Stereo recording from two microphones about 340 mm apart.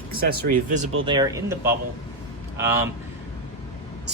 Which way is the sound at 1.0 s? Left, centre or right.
Centre.